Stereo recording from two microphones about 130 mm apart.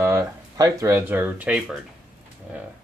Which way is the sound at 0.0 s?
25° right (ahead or behind).